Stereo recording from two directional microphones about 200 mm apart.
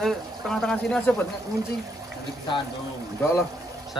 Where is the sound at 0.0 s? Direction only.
Centre (ahead or behind).